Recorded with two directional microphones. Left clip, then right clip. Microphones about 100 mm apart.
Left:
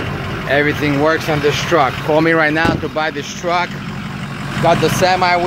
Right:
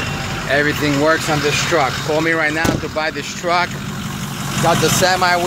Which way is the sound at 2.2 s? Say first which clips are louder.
Left 3 dB; 60° left (ahead or behind).